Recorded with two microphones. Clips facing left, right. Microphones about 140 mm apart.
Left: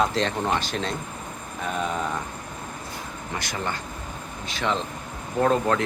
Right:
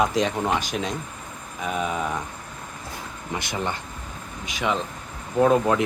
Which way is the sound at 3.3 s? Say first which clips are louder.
Right 2 dB; 20° right (ahead or behind).